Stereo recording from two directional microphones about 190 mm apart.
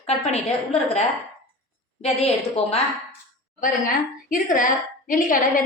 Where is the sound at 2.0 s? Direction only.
35° left (ahead or behind).